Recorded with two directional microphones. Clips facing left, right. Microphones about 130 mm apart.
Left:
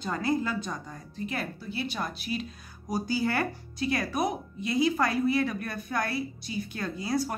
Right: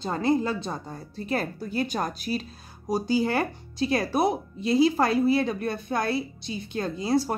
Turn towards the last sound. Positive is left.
turn(degrees=-25)  # may be behind; listen again after turning